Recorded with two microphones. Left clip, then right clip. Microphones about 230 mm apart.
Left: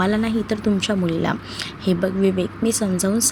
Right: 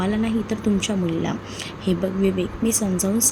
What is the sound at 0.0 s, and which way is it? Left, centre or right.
A woman's voice, left.